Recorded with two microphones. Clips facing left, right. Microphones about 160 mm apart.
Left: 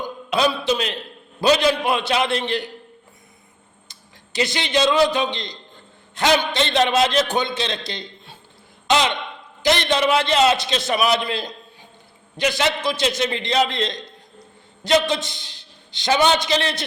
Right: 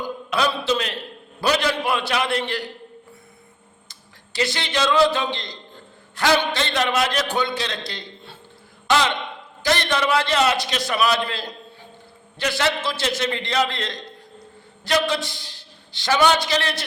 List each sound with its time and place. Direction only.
0.3 s a man's voice: 20° left (ahead or behind)
3.8 s a man's voice: 20° left (ahead or behind)